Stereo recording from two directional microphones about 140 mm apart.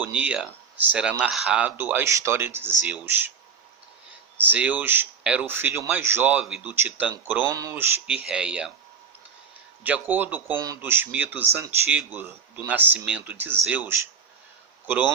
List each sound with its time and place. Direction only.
0.0 s speech: 10° right (ahead or behind)
4.4 s speech: 10° right (ahead or behind)
6.4 s speech: 5° right (ahead or behind); by 7.9 s 20° right (ahead or behind)
8.0 s speech: 5° right (ahead or behind)
9.8 s speech: 10° right (ahead or behind)